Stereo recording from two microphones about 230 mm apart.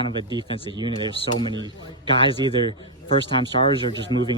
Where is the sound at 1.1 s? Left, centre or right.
Left.